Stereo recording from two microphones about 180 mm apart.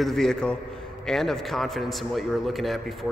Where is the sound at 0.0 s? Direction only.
Centre (ahead or behind).